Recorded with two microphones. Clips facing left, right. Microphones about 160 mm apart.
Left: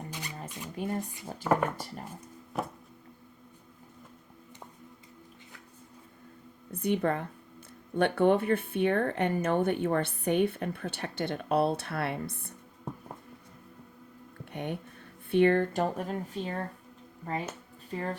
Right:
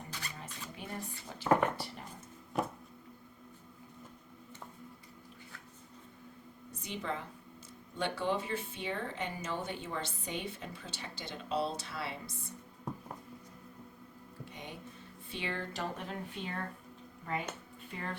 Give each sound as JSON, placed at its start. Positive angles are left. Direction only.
{"t": 0.1, "sound": "zipper", "side_deg": 15}
{"t": 0.8, "sound": "speech", "side_deg": 45}
{"t": 6.7, "sound": "a woman's voice", "side_deg": 60}
{"t": 14.5, "sound": "music", "side_deg": 60}
{"t": 15.3, "sound": "a woman's voice", "side_deg": 55}